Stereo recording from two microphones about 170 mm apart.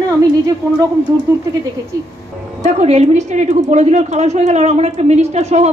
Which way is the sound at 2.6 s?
40° right (ahead or behind).